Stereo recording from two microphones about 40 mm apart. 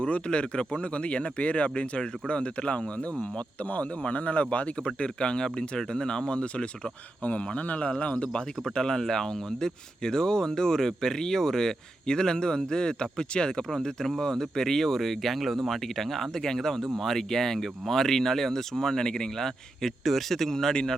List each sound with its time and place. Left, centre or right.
0.0 s speech: left
8.3 s speech: centre